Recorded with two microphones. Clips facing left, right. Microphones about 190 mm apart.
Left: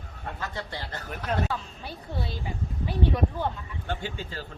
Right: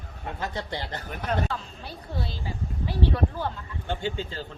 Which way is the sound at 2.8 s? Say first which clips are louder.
Even; 15° left (ahead or behind).